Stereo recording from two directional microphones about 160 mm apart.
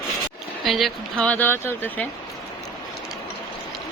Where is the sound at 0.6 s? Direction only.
Centre (ahead or behind).